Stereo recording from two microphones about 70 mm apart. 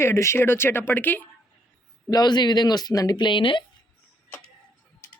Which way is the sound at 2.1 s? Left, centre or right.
Left.